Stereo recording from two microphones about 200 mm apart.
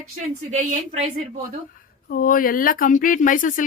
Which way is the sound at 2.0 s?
45° left (ahead or behind).